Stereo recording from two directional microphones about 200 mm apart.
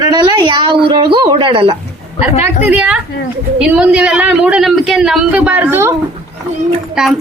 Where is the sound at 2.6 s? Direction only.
5° right (ahead or behind).